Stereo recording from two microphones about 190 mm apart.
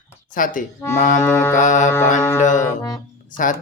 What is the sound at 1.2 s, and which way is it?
Music, 15° left (ahead or behind).